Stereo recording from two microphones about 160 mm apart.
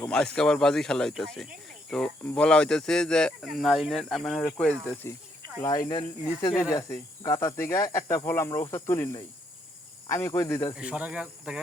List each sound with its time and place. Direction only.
0.3 s speech: 5° left (ahead or behind)
5.9 s speech: 25° left (ahead or behind)
10.8 s speech: 5° right (ahead or behind)